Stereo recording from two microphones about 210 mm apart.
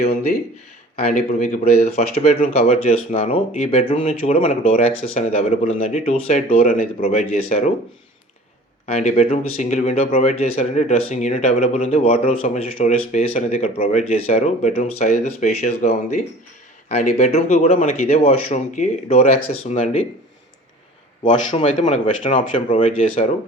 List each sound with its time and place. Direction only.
1.1 s speech: 40° left (ahead or behind)
6.7 s speech: 40° left (ahead or behind)
8.9 s speech: 30° left (ahead or behind)
21.2 s speech: 25° left (ahead or behind)